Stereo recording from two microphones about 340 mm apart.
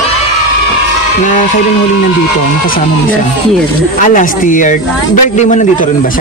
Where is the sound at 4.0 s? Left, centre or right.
Left.